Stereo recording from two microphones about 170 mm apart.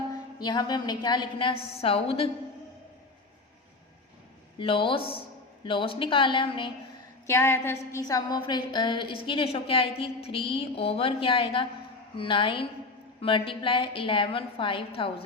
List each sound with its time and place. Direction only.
0.1 s a woman's voice: 25° left (ahead or behind)
4.5 s a woman's voice: 30° left (ahead or behind)
7.3 s a woman's voice: 15° left (ahead or behind); by 15.1 s 30° left (ahead or behind)